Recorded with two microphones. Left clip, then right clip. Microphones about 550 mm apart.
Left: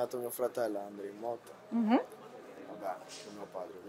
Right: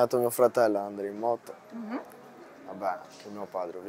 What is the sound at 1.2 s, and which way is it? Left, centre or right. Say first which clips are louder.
Speech: right 10 dB; right.